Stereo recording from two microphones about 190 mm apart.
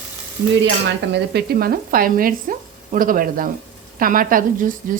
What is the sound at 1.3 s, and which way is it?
Speech, 55° right (ahead or behind).